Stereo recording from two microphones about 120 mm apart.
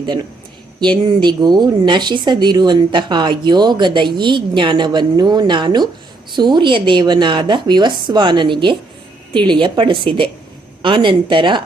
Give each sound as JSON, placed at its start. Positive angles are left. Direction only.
{"t": 0.0, "sound": "a woman's voice", "side_deg": -35}